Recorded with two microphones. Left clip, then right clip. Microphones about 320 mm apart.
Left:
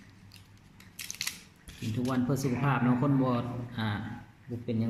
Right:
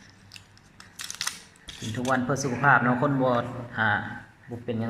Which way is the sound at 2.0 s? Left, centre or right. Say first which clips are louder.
Right 6 dB; right.